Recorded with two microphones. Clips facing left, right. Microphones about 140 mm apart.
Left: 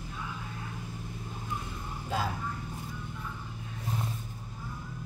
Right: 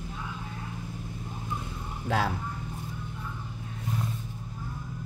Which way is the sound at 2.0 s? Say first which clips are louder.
Right 5 dB; 75° right (ahead or behind).